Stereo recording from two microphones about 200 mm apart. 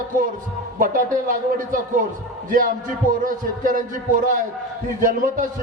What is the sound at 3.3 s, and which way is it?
Speech, 40° right (ahead or behind).